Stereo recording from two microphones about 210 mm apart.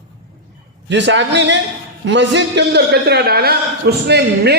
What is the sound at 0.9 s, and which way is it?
A man's voice, 60° right (ahead or behind).